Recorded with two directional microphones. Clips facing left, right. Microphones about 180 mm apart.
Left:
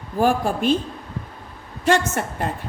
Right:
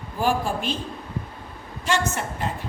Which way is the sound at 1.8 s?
55° left (ahead or behind).